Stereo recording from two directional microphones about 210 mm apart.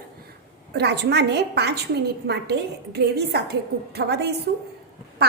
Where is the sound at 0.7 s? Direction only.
50° right (ahead or behind).